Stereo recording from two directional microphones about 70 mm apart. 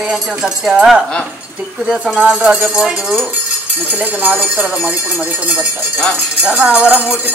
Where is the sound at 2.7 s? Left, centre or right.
Centre.